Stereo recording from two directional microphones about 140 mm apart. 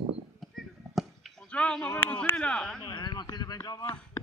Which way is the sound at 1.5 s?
10° left (ahead or behind).